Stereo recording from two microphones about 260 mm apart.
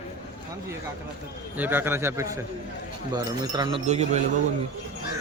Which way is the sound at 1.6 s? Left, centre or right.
Centre.